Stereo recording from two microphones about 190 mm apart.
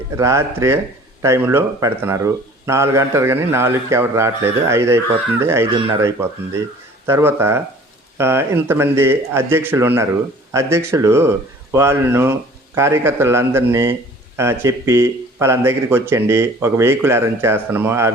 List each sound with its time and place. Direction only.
0.2 s speech: 15° right (ahead or behind)